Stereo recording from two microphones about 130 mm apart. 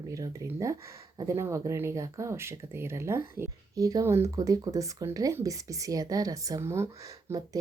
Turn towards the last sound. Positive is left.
turn(degrees=-20)  # may be behind; listen again after turning